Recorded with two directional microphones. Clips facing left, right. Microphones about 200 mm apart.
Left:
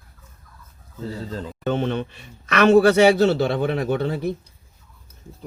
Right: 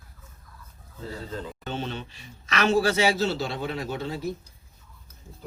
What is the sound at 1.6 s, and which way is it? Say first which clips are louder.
Speech: left 12 dB; 60° left (ahead or behind).